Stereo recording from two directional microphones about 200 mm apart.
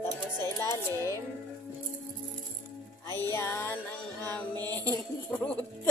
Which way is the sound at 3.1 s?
10° left (ahead or behind).